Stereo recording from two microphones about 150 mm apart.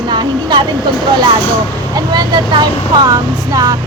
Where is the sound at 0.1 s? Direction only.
30° right (ahead or behind).